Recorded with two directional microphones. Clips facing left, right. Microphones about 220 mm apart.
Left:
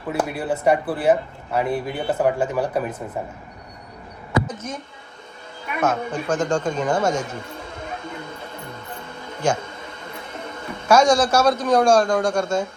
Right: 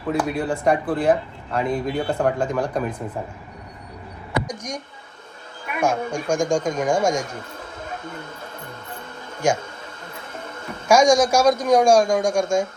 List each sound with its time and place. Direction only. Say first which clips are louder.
0.1 s speech: right 1 dB; 5° left (ahead or behind)
4.4 s speech: even; 15° right (ahead or behind)
5.8 s a man's voice: even; 10° right (ahead or behind)
9.4 s a man's voice: right 1 dB; 10° right (ahead or behind)
10.8 s a man's voice: right 1 dB; 10° right (ahead or behind)